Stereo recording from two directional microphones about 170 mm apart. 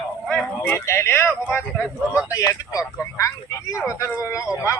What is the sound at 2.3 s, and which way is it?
Speech, 20° left (ahead or behind).